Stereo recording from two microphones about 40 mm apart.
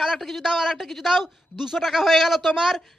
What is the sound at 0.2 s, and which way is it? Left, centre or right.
A man's voice, centre.